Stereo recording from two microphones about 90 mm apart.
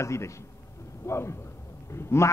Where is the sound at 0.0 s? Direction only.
30° left (ahead or behind).